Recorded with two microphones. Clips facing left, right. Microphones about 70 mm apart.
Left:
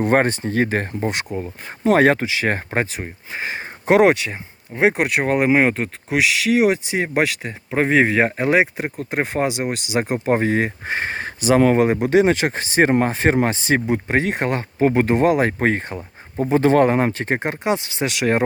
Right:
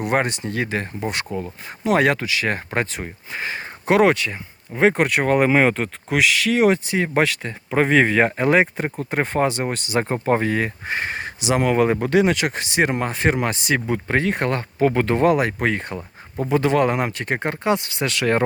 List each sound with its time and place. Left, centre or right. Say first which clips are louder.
0.0 s speech: left 4 dB; left
1.0 s speech: left 2 dB; left
2.9 s speech: left 1 dB; centre
7.1 s speech: even; centre; by 11.8 s left
11.8 s speech: left 2 dB; left
13.2 s speech: left 3 dB; left
15.4 s speech: left 3 dB; left